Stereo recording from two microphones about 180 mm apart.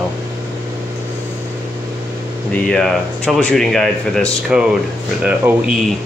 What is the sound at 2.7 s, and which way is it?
Speech, 5° left (ahead or behind).